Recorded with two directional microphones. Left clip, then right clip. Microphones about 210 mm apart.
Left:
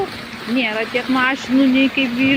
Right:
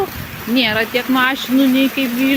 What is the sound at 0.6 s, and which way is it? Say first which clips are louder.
Speech: right 4 dB; 30° right (ahead or behind).